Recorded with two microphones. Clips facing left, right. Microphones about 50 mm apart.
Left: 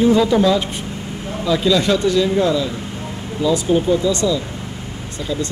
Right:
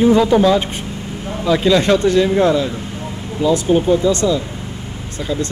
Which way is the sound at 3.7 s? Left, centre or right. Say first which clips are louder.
Right 2 dB; right.